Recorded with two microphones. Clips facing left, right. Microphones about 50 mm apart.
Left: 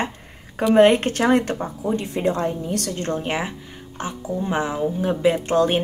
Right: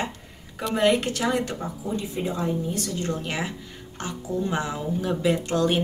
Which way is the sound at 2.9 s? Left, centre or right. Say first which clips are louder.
Left 4 dB; left.